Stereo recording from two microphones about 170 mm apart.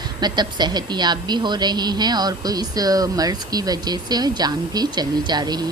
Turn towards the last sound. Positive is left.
turn(degrees=-25)  # may be behind; listen again after turning